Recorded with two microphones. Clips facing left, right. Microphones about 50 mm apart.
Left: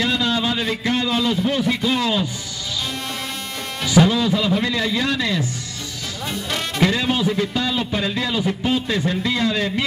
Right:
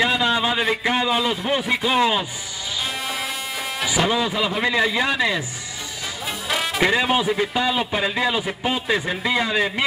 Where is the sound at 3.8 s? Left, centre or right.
Centre.